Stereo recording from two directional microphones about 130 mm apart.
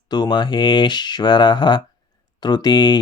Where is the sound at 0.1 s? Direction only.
35° left (ahead or behind).